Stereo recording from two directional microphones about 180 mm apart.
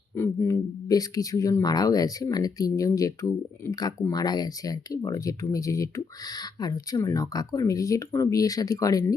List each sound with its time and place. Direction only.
0.2 s speech: 15° left (ahead or behind)